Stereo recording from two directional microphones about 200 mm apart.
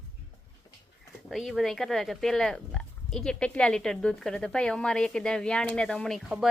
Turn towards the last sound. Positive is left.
turn(degrees=0)  # may be behind; listen again after turning